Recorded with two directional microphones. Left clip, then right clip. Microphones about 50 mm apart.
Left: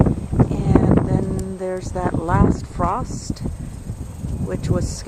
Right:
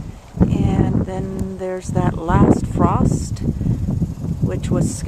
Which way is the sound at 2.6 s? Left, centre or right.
Centre.